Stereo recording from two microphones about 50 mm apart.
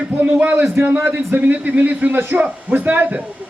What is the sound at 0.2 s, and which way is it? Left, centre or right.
A man's voice, right.